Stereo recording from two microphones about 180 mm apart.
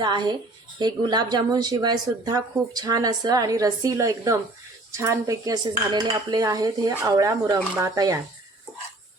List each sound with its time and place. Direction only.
0.0 s speech: 25° right (ahead or behind)